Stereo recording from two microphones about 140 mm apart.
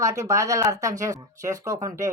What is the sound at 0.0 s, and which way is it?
Speech, 20° right (ahead or behind).